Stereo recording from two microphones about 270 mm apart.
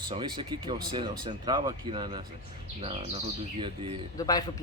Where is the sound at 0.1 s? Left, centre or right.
Centre.